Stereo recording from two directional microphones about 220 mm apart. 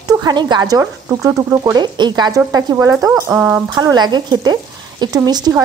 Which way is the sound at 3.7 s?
20° right (ahead or behind).